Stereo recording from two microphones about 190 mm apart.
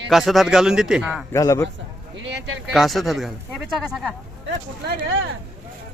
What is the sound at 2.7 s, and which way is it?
A man's voice, centre (ahead or behind).